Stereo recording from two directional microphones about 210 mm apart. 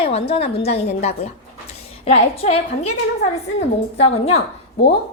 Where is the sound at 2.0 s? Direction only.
30° left (ahead or behind).